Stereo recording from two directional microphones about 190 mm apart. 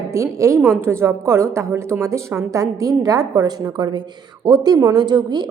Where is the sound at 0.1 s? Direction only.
15° right (ahead or behind).